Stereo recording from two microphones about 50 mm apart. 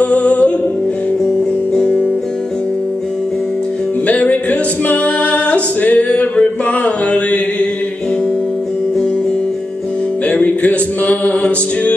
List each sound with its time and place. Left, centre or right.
0.0 s music: left
4.1 s music: left
10.3 s music: left